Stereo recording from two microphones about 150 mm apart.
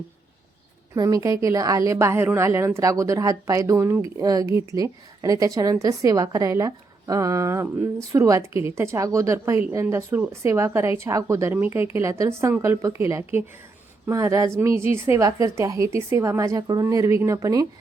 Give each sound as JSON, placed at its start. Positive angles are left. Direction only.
{"t": 0.9, "sound": "a woman's voice", "side_deg": -20}